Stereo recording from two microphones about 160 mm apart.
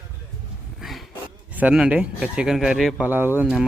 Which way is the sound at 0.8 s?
Centre (ahead or behind).